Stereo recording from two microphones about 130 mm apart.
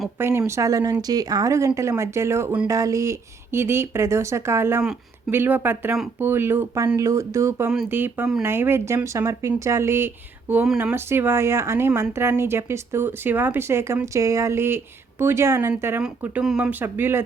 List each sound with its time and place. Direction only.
0.2 s speech: 20° right (ahead or behind)